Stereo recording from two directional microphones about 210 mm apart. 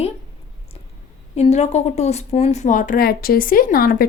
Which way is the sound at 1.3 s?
30° left (ahead or behind).